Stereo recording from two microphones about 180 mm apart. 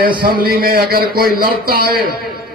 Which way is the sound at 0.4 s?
55° right (ahead or behind).